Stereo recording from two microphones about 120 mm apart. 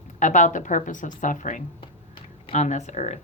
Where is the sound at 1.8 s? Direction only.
45° left (ahead or behind).